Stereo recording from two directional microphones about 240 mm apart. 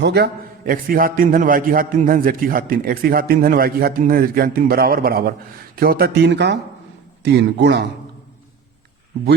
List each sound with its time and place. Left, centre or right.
0.0 s a man's voice: right